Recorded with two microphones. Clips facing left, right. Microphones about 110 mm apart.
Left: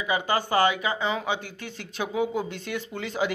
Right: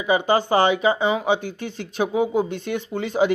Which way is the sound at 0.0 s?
25° right (ahead or behind).